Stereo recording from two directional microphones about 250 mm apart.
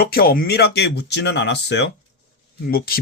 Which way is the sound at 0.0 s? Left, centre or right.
Left.